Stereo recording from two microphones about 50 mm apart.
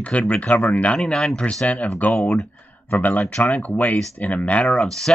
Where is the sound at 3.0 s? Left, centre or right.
Left.